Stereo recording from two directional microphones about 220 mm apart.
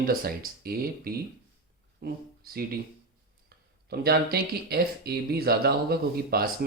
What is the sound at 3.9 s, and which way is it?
Speech, 45° right (ahead or behind).